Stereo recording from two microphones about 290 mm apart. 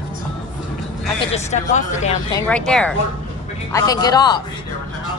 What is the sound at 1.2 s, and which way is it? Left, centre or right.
Speech, left.